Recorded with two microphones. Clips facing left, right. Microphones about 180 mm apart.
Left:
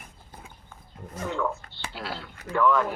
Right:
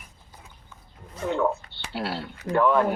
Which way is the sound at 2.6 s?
40° right (ahead or behind).